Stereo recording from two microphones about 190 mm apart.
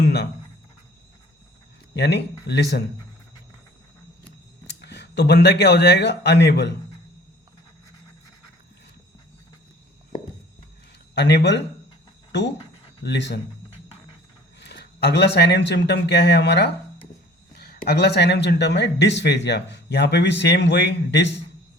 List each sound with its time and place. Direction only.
1.9 s speech: 60° left (ahead or behind)
4.6 s speech: 65° left (ahead or behind)
11.1 s speech: 65° left (ahead or behind)
14.6 s speech: 60° left (ahead or behind)